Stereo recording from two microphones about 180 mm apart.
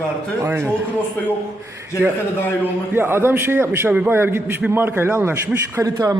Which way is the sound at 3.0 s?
10° right (ahead or behind).